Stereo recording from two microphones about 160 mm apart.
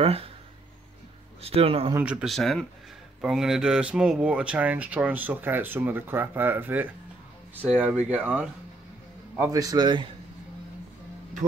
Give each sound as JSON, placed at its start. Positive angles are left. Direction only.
{"t": 0.0, "sound": "speech", "side_deg": -40}
{"t": 1.4, "sound": "speech", "side_deg": -35}
{"t": 2.0, "sound": "speech", "side_deg": -5}
{"t": 9.4, "sound": "a man's voice", "side_deg": -20}